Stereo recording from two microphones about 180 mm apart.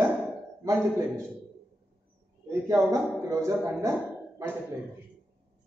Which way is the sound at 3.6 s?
15° right (ahead or behind).